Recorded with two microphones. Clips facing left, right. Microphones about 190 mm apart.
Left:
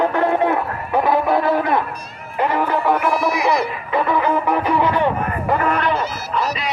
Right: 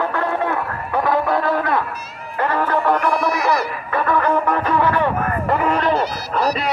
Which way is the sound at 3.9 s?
15° left (ahead or behind).